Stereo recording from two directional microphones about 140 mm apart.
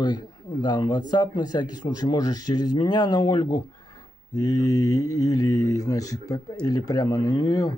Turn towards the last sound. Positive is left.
turn(degrees=25)  # may be behind; listen again after turning